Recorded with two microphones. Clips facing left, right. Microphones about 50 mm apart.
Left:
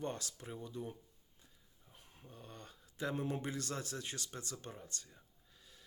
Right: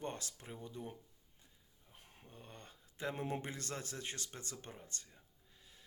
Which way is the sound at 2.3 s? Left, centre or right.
Right.